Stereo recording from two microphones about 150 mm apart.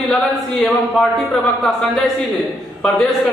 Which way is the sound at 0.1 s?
Centre (ahead or behind).